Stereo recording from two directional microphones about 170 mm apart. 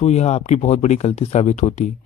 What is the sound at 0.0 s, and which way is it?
Speech, 40° left (ahead or behind).